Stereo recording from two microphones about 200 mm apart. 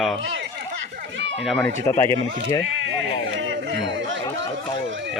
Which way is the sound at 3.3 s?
65° right (ahead or behind).